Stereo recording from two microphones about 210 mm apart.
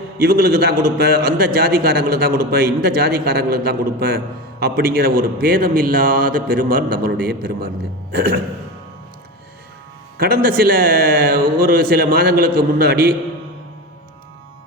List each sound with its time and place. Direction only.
0.3 s a man's voice: 45° right (ahead or behind)
10.2 s a man's voice: 45° right (ahead or behind)